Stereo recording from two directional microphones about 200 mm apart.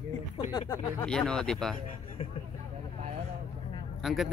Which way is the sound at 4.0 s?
Centre (ahead or behind).